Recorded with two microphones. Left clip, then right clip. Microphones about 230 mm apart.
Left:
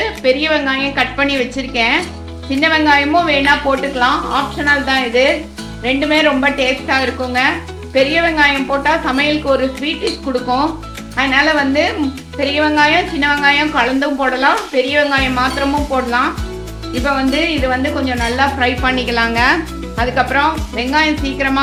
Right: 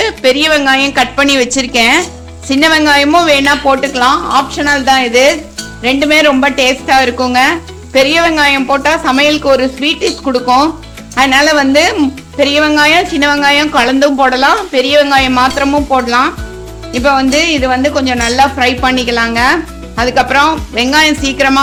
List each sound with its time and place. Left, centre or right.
0.0 s a woman's voice: right